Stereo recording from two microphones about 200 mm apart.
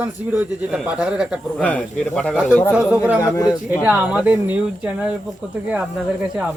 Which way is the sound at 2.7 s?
10° right (ahead or behind).